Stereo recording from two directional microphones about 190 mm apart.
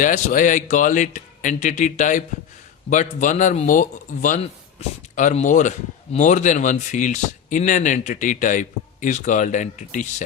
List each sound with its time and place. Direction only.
0.0 s speech: 45° left (ahead or behind)